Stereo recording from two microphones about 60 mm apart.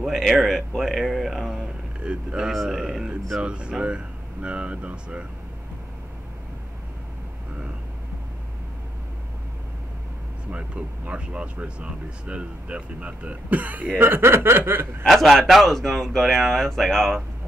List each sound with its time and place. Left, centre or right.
0.0 s speech: centre
2.0 s speech: centre
11.1 s speech: centre
13.9 s snicker: right
15.0 s speech: centre